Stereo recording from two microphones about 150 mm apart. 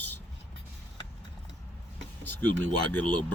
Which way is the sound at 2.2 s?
10° left (ahead or behind).